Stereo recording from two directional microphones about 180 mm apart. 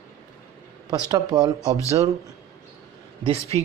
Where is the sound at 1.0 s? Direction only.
20° right (ahead or behind).